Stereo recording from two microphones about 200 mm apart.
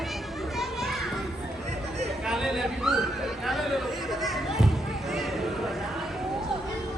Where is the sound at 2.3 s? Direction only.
Centre (ahead or behind).